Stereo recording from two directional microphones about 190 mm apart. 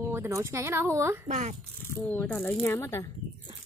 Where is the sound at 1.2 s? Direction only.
40° right (ahead or behind).